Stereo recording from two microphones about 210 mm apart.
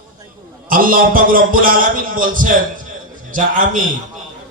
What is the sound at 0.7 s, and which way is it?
Speech, 40° right (ahead or behind).